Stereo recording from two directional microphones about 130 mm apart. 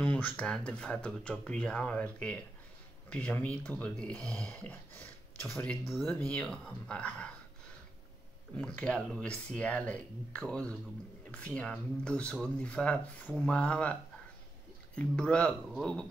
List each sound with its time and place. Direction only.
0.0 s speech: 10° left (ahead or behind)
8.5 s speech: 10° left (ahead or behind)
15.0 s speech: 10° left (ahead or behind)